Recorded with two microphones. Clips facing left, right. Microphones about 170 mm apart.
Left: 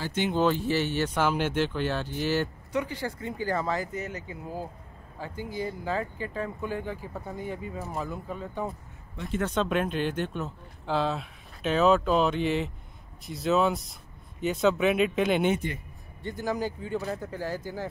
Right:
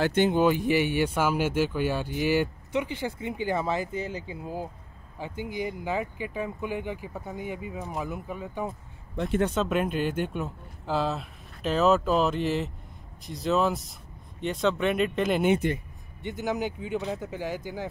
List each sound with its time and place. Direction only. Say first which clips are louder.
0.3 s speech: right 2 dB; 15° right (ahead or behind)
15.7 s a sound: right 7 dB; 20° right (ahead or behind)
16.5 s speech: right 1 dB; 20° right (ahead or behind)
17.0 s speech: right 1 dB; centre (ahead or behind)